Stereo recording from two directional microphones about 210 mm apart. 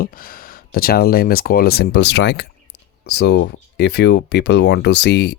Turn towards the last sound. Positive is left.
turn(degrees=55)  # may be behind; listen again after turning